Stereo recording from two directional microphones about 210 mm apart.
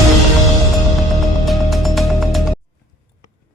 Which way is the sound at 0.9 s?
Centre (ahead or behind).